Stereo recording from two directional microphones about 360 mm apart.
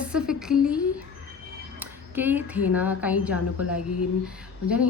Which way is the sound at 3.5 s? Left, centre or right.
Left.